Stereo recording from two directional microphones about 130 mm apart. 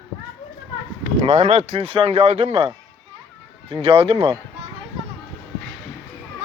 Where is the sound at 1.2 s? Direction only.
60° right (ahead or behind).